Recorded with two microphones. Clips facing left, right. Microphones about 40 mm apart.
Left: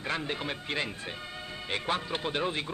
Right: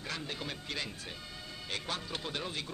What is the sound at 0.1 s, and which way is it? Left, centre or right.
Speech, left.